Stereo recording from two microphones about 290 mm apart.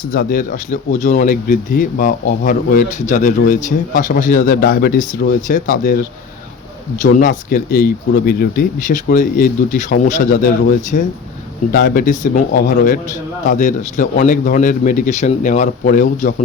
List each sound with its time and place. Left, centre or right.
0.0 s speech: left
7.0 s speech: left